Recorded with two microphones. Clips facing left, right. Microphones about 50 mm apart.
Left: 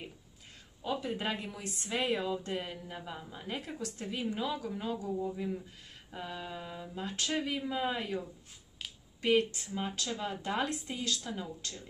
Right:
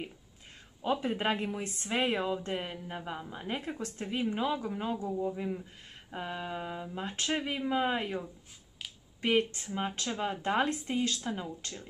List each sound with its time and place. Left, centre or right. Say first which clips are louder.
1.0 s a woman's voice: right 5 dB; right